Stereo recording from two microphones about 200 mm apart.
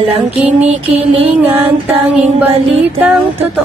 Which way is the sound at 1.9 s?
30° right (ahead or behind).